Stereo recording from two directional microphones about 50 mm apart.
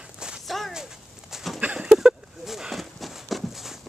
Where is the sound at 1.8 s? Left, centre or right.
Centre.